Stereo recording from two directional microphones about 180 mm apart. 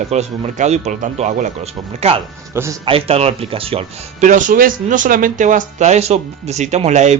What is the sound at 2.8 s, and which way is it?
Speech, 35° right (ahead or behind).